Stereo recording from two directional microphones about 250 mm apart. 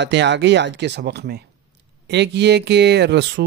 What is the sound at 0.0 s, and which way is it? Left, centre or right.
Speech, right.